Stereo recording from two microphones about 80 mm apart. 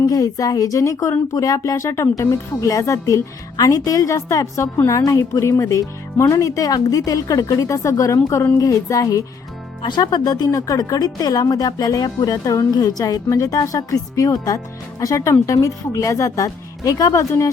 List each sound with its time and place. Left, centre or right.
0.0 s speech: left
9.8 s speech: left